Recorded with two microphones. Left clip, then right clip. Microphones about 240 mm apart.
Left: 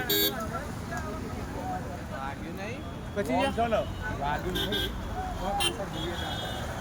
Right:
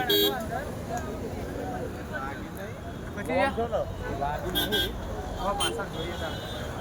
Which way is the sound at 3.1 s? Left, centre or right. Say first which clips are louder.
Right 1 dB; centre.